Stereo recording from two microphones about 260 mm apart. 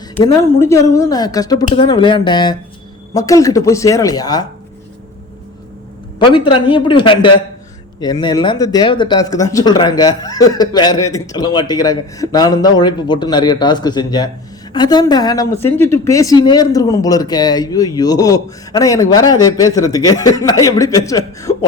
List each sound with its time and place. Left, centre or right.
0.2 s speech: centre
6.1 s speech: centre